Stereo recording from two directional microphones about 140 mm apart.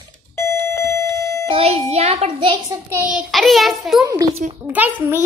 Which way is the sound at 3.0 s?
5° right (ahead or behind).